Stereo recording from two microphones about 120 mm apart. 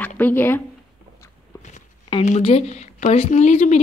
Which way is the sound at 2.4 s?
55° left (ahead or behind).